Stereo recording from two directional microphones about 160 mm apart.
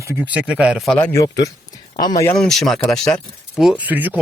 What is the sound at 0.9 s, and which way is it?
Speech, 15° left (ahead or behind).